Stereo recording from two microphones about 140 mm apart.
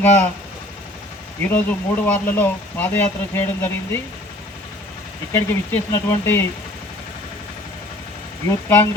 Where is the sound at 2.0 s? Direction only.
15° left (ahead or behind).